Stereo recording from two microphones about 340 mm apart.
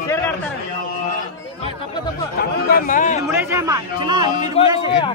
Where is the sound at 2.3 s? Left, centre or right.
Left.